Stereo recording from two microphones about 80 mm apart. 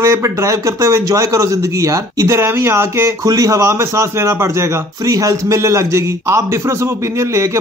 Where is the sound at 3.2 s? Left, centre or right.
Right.